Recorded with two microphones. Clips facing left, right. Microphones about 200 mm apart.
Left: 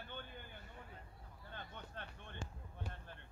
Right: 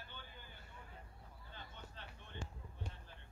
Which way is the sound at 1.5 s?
55° left (ahead or behind).